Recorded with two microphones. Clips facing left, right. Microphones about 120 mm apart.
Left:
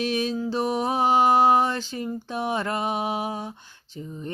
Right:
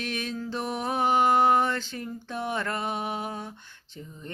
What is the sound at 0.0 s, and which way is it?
Music, 20° left (ahead or behind).